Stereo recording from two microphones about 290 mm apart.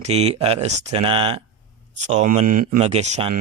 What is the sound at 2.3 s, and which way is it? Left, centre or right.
Speech, right.